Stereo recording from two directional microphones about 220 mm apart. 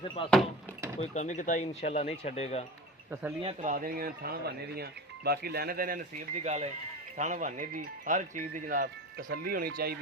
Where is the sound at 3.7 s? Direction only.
40° right (ahead or behind).